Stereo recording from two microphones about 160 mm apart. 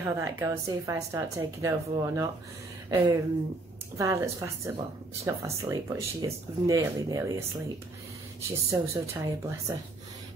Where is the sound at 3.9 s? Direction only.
20° right (ahead or behind).